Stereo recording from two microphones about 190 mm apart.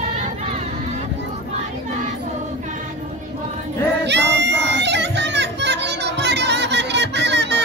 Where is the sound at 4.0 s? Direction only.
65° right (ahead or behind).